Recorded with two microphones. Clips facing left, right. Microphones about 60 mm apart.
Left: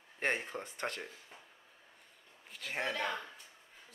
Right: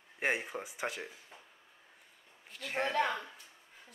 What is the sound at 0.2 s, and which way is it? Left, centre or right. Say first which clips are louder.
Speech: right 1 dB; centre.